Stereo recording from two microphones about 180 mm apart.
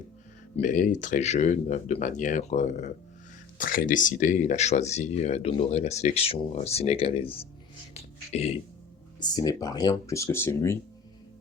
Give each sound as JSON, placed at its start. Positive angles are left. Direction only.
{"t": 0.5, "sound": "speech", "side_deg": 45}
{"t": 9.2, "sound": "speech", "side_deg": 20}